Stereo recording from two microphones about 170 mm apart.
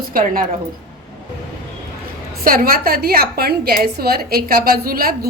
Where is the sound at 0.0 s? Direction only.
55° right (ahead or behind).